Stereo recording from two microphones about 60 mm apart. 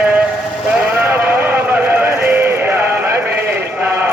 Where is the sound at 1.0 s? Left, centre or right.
Right.